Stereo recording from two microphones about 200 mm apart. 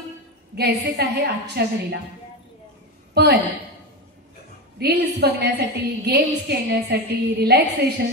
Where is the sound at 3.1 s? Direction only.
55° right (ahead or behind).